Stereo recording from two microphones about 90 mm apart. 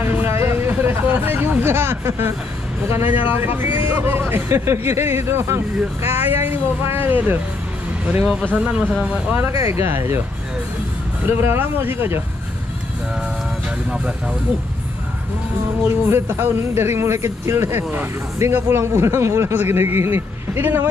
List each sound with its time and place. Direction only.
0.0 s speech: 25° right (ahead or behind)
9.3 s speech: 30° right (ahead or behind)
11.2 s speech: 25° right (ahead or behind)
15.9 s speech: 25° right (ahead or behind)